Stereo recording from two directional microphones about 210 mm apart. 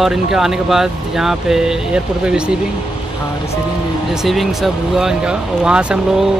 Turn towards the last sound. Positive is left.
turn(degrees=-5)  # may be behind; listen again after turning